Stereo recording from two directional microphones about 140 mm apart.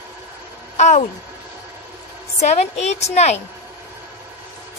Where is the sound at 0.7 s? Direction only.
55° left (ahead or behind).